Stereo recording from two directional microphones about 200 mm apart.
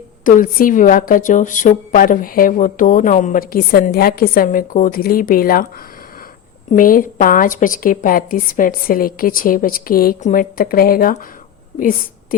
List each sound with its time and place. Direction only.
0.3 s a woman's voice: 40° left (ahead or behind)
6.7 s a woman's voice: 45° left (ahead or behind)